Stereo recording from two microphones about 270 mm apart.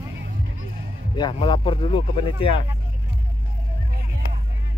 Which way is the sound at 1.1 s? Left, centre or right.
Centre.